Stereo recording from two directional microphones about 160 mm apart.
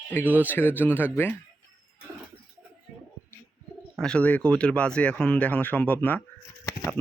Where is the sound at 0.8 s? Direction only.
10° left (ahead or behind).